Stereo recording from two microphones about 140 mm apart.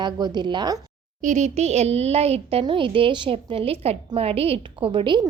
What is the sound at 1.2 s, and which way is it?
A woman's voice, 60° right (ahead or behind).